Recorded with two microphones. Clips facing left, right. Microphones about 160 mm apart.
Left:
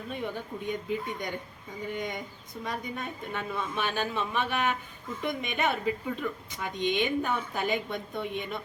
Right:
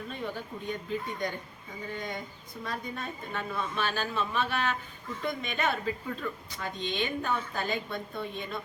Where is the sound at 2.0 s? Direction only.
15° left (ahead or behind).